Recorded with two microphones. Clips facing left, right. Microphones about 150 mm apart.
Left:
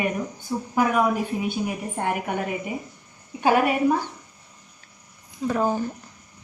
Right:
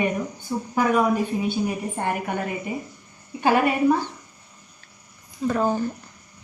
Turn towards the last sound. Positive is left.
turn(degrees=10)  # may be behind; listen again after turning